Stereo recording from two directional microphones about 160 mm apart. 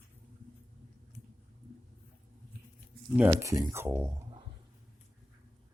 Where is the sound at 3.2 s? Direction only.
15° right (ahead or behind).